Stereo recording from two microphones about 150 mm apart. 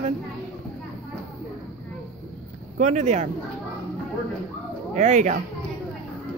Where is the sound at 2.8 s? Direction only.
50° right (ahead or behind).